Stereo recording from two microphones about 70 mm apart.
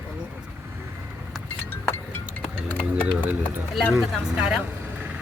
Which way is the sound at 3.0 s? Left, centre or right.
Right.